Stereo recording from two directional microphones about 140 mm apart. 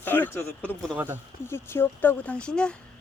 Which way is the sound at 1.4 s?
15° left (ahead or behind).